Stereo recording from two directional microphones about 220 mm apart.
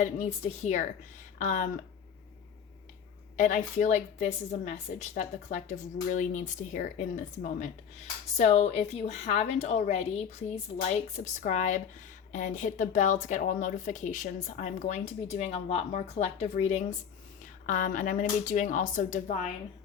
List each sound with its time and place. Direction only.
0.0 s speech: 30° left (ahead or behind)
3.3 s speech: 35° left (ahead or behind)
8.4 s speech: 30° left (ahead or behind)